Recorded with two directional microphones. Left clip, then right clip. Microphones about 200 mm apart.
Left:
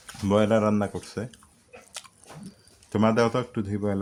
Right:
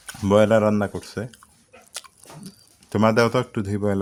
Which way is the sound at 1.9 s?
25° right (ahead or behind).